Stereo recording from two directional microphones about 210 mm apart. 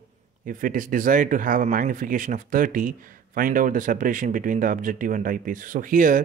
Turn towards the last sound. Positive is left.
turn(degrees=-40)  # may be behind; listen again after turning